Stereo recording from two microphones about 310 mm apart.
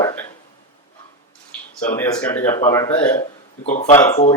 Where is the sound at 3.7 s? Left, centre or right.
Left.